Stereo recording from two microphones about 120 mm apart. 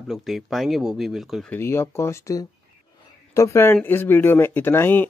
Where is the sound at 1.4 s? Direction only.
20° left (ahead or behind).